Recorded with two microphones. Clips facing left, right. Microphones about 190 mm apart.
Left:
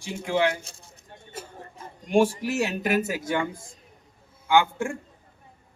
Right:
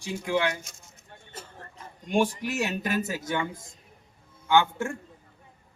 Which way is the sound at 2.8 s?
15° left (ahead or behind).